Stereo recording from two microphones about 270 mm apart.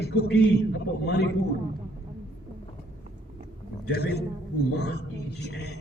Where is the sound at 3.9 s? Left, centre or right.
Left.